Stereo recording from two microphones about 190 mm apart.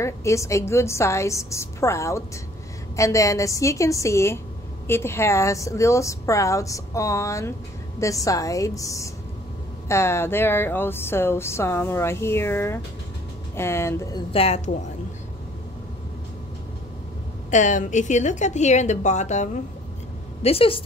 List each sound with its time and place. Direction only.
0.0 s speech: 15° left (ahead or behind)
14.3 s a woman's voice: 30° left (ahead or behind)
17.5 s a woman's voice: 40° left (ahead or behind)